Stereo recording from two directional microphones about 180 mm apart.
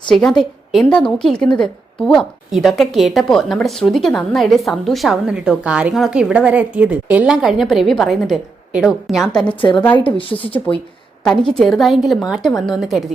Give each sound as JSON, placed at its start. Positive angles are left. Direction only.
{"t": 0.1, "sound": "a woman's voice", "side_deg": 5}
{"t": 11.2, "sound": "a woman's voice", "side_deg": 5}